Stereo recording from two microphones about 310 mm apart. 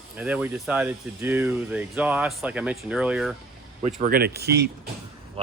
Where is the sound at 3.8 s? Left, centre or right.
Right.